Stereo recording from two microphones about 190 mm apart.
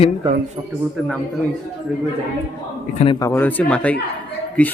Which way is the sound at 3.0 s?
25° left (ahead or behind).